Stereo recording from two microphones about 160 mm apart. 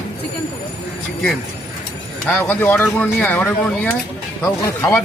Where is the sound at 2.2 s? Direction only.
10° left (ahead or behind).